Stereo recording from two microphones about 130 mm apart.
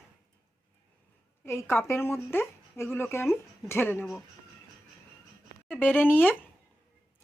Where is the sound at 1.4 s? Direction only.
20° left (ahead or behind).